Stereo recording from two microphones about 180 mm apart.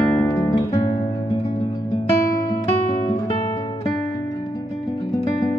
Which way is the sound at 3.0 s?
25° left (ahead or behind).